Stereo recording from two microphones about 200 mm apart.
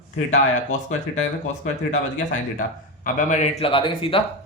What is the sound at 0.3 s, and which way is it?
A man's voice, 35° left (ahead or behind).